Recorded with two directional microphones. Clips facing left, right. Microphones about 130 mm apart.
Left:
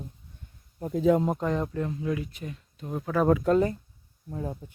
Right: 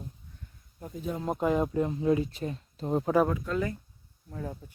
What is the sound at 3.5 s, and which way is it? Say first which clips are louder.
Speech: left 8 dB; 35° left (ahead or behind).